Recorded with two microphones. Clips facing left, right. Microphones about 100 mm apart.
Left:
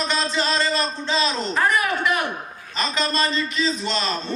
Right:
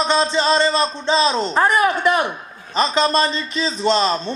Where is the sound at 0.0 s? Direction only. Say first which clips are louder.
Right 6 dB; 25° right (ahead or behind).